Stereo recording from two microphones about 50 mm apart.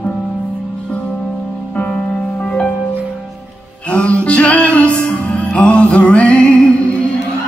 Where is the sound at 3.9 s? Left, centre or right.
Left.